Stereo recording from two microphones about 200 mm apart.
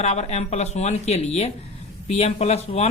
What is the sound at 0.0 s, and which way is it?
Speech, 35° left (ahead or behind).